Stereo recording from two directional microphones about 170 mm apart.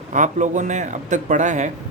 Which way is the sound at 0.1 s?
45° right (ahead or behind).